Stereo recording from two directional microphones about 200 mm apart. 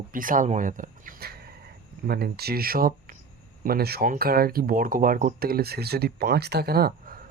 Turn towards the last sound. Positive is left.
turn(degrees=-50)  # may be behind; listen again after turning